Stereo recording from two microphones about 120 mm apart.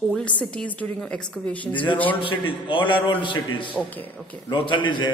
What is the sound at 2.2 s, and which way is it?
A man's voice, 45° left (ahead or behind).